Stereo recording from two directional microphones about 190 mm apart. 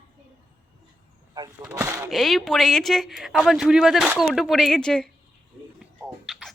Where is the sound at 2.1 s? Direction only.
Centre (ahead or behind).